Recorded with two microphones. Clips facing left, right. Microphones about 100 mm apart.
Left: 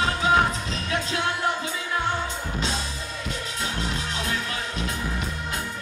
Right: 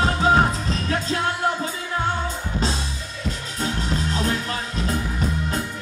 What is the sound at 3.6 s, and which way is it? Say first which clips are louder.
Music: right 6 dB; 35° right (ahead or behind).